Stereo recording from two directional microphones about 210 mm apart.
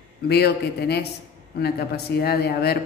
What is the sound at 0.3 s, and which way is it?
Speech, 50° left (ahead or behind).